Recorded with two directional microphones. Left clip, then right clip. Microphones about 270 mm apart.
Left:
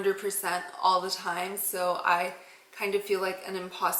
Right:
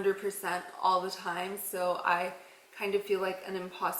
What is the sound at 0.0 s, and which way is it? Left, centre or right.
A woman's voice, centre.